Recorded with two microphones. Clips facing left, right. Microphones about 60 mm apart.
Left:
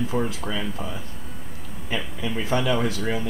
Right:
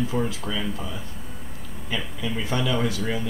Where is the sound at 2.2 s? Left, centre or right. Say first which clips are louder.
Left 3 dB; centre.